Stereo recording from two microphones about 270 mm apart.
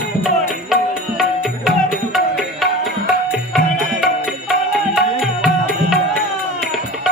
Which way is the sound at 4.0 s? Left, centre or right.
Centre.